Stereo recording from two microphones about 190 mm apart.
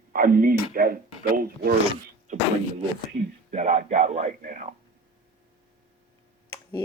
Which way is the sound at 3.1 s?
35° right (ahead or behind).